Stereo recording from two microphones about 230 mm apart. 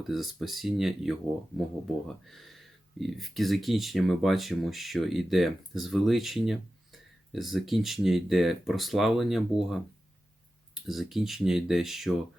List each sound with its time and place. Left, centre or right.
0.0 s speech: centre
10.8 s speech: centre